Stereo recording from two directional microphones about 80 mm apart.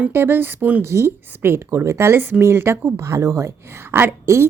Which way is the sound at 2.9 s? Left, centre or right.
Right.